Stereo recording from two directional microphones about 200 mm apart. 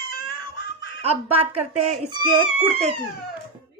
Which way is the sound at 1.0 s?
30° right (ahead or behind).